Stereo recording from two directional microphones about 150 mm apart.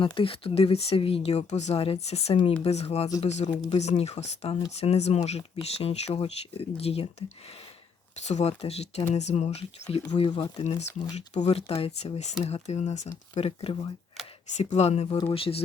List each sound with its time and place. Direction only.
0.0 s speech: 35° left (ahead or behind)
10.6 s speech: 50° left (ahead or behind)
14.5 s speech: 50° left (ahead or behind)